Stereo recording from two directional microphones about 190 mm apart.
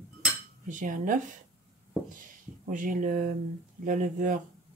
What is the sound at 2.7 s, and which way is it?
Speech, 45° right (ahead or behind).